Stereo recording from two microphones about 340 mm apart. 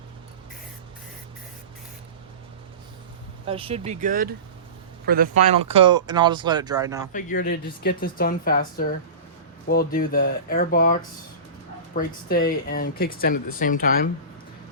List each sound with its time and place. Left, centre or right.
3.4 s speech: centre
7.1 s speech: left
11.9 s speech: left